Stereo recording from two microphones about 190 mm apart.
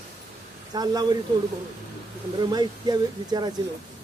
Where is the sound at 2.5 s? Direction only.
20° right (ahead or behind).